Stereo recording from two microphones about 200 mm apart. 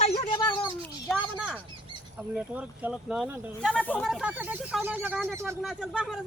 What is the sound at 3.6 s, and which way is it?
Speech, 5° left (ahead or behind).